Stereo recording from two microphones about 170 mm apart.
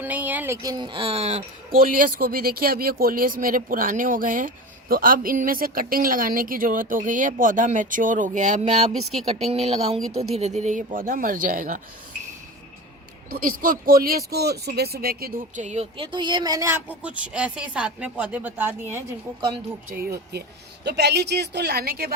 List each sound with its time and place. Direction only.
0.0 s speech: 10° right (ahead or behind); by 1.5 s 40° right (ahead or behind)
1.7 s speech: 55° right (ahead or behind)
13.3 s speech: 55° right (ahead or behind)
15.6 s speech: 40° right (ahead or behind)
16.1 s speech: 25° right (ahead or behind)
19.9 s speech: 60° right (ahead or behind)
20.8 s a woman's voice: 80° right